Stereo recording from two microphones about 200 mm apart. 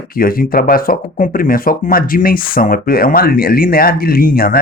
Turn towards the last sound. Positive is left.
turn(degrees=50)  # may be behind; listen again after turning